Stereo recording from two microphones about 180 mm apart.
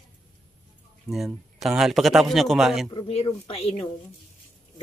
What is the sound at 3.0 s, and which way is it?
Speech, 30° left (ahead or behind).